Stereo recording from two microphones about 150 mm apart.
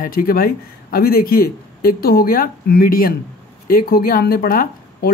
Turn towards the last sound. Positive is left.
turn(degrees=75)  # may be behind; listen again after turning